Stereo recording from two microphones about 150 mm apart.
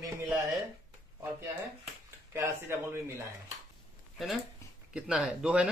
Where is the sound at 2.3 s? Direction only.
20° right (ahead or behind).